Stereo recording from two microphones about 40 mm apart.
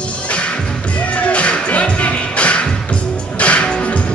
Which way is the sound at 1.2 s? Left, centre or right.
Left.